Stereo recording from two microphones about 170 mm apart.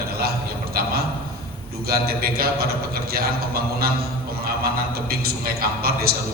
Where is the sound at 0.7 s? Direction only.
60° right (ahead or behind).